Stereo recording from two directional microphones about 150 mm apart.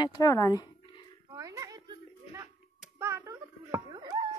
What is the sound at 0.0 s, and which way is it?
Speech, 25° left (ahead or behind).